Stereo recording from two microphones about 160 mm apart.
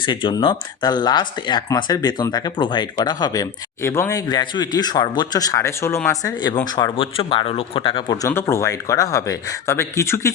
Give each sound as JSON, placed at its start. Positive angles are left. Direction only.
{"t": 0.0, "sound": "speech", "side_deg": 30}
{"t": 6.9, "sound": "speech", "side_deg": 35}
{"t": 8.3, "sound": "speech", "side_deg": 15}